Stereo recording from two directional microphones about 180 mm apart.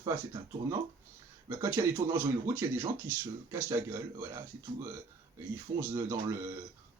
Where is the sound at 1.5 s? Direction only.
15° right (ahead or behind).